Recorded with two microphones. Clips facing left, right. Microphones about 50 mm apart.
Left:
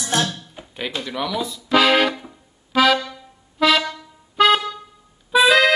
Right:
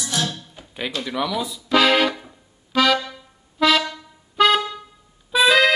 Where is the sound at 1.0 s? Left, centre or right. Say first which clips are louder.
Right 1 dB; centre.